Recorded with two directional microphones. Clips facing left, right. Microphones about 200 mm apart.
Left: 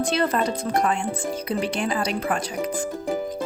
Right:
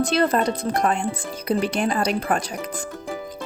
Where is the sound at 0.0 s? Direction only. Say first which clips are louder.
Right 3 dB; 40° right (ahead or behind).